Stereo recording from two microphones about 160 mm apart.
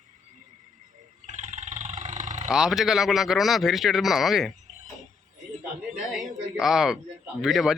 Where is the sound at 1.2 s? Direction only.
45° right (ahead or behind).